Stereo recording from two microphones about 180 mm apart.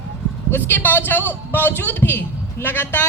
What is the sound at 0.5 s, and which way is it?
A man's voice, 10° left (ahead or behind).